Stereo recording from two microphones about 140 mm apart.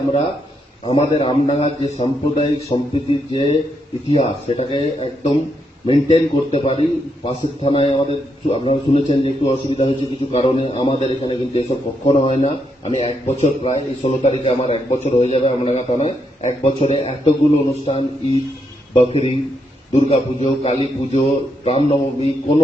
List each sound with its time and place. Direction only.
0.9 s a man's voice: 45° left (ahead or behind)